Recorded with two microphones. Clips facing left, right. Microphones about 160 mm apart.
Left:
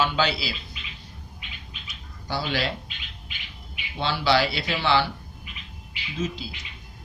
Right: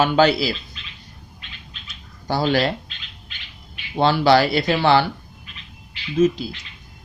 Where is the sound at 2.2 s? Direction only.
45° right (ahead or behind).